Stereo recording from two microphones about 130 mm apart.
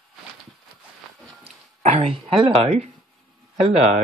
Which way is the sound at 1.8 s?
55° right (ahead or behind).